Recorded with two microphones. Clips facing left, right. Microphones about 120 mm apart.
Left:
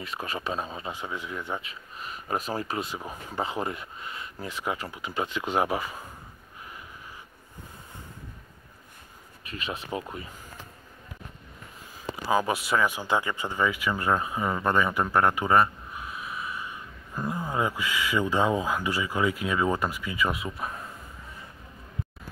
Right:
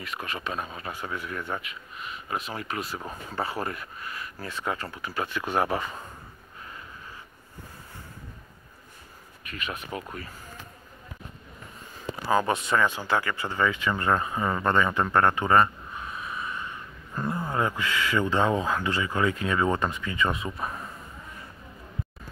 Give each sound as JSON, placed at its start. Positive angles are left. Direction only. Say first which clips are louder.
{"t": 0.0, "sound": "speech", "louder": "left 1 dB", "side_deg": 30}
{"t": 1.6, "sound": "speech", "louder": "right 1 dB", "side_deg": 35}
{"t": 3.0, "sound": "speech", "louder": "even", "side_deg": 15}
{"t": 9.5, "sound": "speech", "louder": "left 1 dB", "side_deg": 30}
{"t": 9.8, "sound": "speech", "louder": "left 2 dB", "side_deg": 20}
{"t": 12.3, "sound": "speech", "louder": "right 1 dB", "side_deg": 10}